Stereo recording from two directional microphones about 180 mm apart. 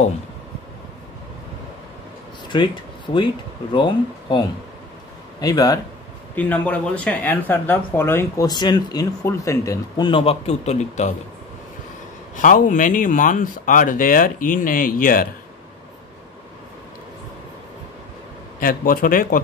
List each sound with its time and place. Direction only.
2.5 s speech: 25° left (ahead or behind)
5.4 s speech: 20° left (ahead or behind)
6.3 s speech: 10° left (ahead or behind); by 11.1 s 40° left (ahead or behind)
12.4 s speech: 45° left (ahead or behind)
18.6 s speech: 50° left (ahead or behind)